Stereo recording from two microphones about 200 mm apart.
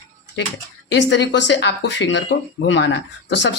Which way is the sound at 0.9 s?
60° left (ahead or behind).